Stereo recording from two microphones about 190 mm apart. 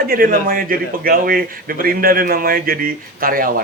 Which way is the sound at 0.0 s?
50° right (ahead or behind).